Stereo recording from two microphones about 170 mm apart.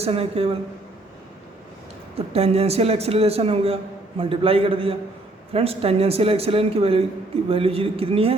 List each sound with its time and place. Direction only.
0.0 s speech: 35° right (ahead or behind)
2.1 s speech: 35° right (ahead or behind)